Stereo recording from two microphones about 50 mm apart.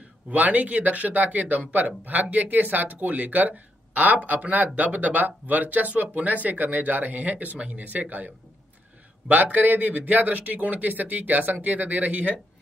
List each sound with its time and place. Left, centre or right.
0.3 s speech: right
9.3 s speech: right